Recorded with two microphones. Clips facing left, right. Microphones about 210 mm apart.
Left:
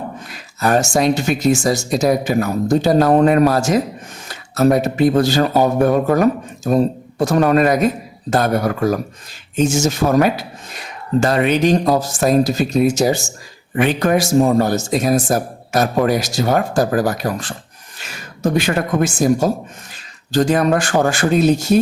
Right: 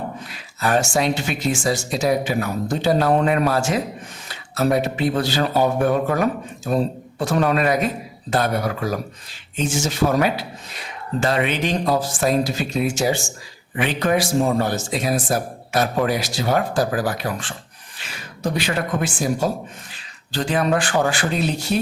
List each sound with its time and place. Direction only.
0.3 s speech: 45° left (ahead or behind)